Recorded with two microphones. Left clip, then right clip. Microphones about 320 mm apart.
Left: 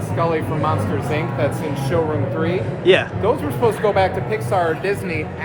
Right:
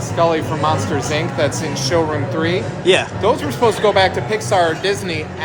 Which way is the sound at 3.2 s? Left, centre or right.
Right.